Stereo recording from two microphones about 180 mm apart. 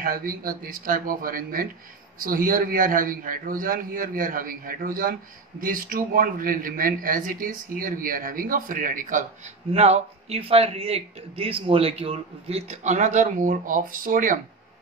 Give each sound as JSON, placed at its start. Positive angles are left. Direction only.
{"t": 0.0, "sound": "speech", "side_deg": -55}
{"t": 9.7, "sound": "a man's voice", "side_deg": -35}